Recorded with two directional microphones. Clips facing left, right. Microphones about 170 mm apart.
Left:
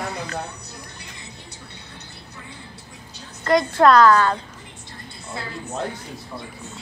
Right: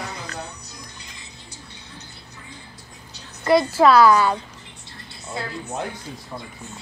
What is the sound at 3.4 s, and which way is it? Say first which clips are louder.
Speech: even; 5° right (ahead or behind).